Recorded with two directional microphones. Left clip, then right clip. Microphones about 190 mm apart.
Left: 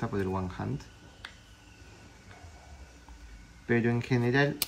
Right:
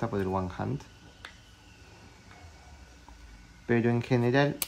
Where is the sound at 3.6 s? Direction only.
20° right (ahead or behind).